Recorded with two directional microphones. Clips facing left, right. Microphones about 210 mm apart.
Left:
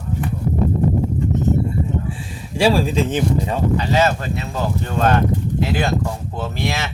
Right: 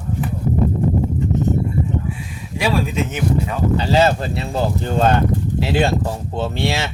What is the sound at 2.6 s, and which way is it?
Speech, 30° left (ahead or behind).